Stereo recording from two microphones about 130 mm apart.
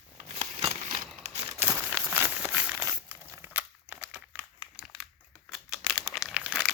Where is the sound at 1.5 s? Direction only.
20° right (ahead or behind).